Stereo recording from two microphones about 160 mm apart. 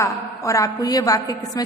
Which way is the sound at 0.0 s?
20° left (ahead or behind).